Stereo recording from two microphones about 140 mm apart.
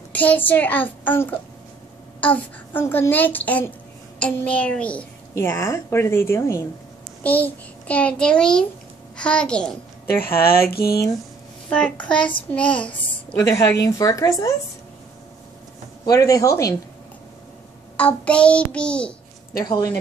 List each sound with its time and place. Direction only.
0.1 s a child's voice: 10° left (ahead or behind)
5.3 s a woman's voice: 20° left (ahead or behind)
10.2 s speech: 90° left
11.7 s a child's voice: 10° left (ahead or behind)
12.2 s a child's voice: 35° left (ahead or behind)
12.5 s a child's voice: 10° left (ahead or behind)
13.4 s a woman's voice: 20° left (ahead or behind)
16.1 s a woman's voice: 25° left (ahead or behind)
17.9 s a child's voice: 10° left (ahead or behind)
19.6 s a woman's voice: 30° left (ahead or behind)